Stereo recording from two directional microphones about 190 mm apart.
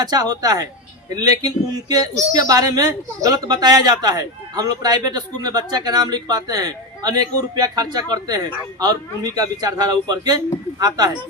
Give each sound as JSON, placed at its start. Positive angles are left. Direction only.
{"t": 0.0, "sound": "speech", "side_deg": -20}